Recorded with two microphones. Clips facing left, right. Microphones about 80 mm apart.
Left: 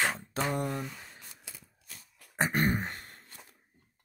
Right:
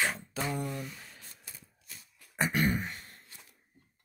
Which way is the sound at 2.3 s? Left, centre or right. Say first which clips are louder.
Left 1 dB; left.